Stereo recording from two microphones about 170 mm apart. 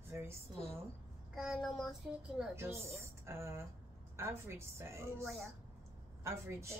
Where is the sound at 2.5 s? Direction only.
15° right (ahead or behind).